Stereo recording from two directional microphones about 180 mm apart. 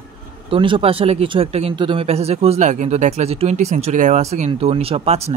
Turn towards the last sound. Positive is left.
turn(degrees=-35)  # may be behind; listen again after turning